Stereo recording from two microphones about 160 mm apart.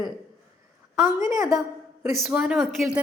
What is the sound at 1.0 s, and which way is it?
Speech, 20° right (ahead or behind).